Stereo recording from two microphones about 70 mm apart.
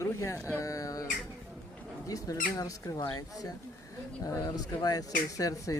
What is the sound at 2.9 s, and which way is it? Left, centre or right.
Speech, left.